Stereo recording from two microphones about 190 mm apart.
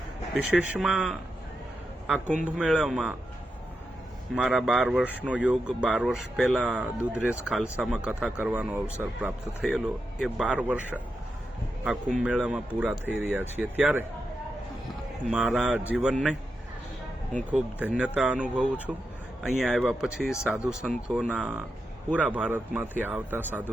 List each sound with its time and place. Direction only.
0.3 s speech: centre (ahead or behind)
2.4 s speech: 5° right (ahead or behind)
4.4 s a man's voice: centre (ahead or behind)
15.3 s speech: centre (ahead or behind)
17.5 s a man's voice: 5° right (ahead or behind)